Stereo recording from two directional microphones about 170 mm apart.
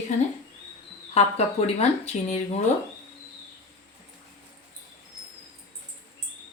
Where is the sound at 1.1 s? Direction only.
40° left (ahead or behind).